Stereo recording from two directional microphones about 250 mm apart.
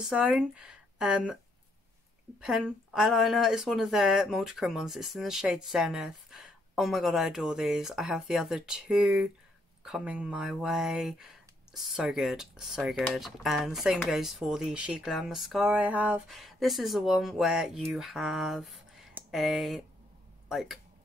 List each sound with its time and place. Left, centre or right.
0.0 s speech: centre
2.4 s speech: centre